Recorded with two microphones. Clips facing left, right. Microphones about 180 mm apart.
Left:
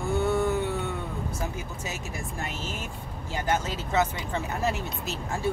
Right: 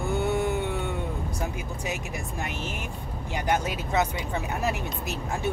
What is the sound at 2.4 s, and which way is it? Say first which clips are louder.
Speech: right 1 dB; 15° right (ahead or behind).